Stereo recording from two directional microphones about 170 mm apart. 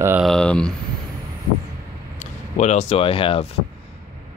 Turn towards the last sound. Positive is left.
turn(degrees=30)  # may be behind; listen again after turning